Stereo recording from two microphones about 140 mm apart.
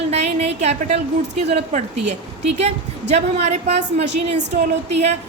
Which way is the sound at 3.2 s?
50° right (ahead or behind).